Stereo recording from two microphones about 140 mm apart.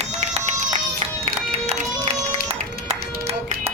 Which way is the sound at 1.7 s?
45° right (ahead or behind).